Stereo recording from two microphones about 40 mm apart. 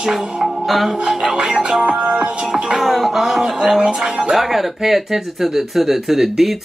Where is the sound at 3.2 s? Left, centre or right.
Centre.